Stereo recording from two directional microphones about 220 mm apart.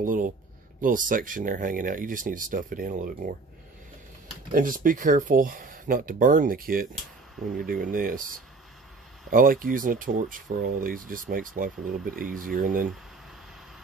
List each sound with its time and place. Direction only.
0.0 s speech: 40° right (ahead or behind)
4.5 s speech: 40° right (ahead or behind)